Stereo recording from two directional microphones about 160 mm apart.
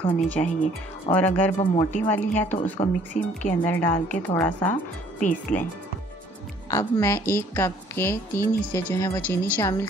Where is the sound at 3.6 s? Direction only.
10° left (ahead or behind).